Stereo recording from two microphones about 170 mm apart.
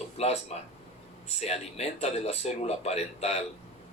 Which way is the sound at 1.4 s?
40° left (ahead or behind).